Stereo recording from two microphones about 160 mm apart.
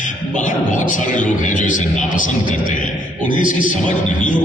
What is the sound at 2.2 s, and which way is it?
A man's voice, 55° left (ahead or behind).